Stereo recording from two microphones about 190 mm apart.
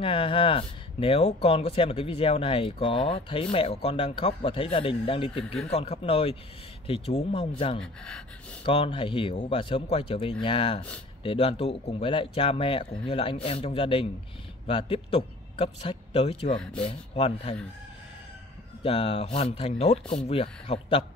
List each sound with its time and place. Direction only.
0.0 s speech: 30° left (ahead or behind)
5.4 s speech: centre (ahead or behind)
5.7 s a man's voice: 30° left (ahead or behind)
7.8 s speech: 5° left (ahead or behind)
8.6 s a man's voice: 30° left (ahead or behind)
18.8 s a man's voice: 30° left (ahead or behind)